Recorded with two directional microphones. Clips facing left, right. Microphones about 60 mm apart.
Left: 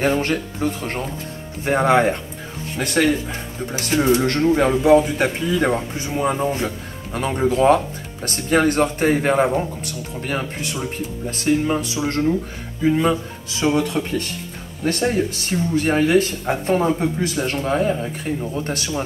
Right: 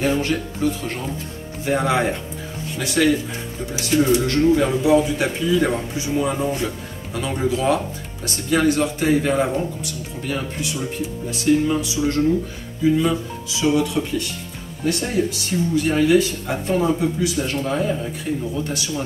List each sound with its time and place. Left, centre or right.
0.0 s speech: left